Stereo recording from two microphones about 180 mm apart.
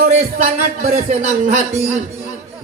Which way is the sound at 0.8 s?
40° right (ahead or behind).